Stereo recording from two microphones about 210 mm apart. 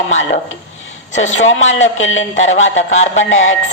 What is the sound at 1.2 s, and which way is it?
Speech, 35° left (ahead or behind).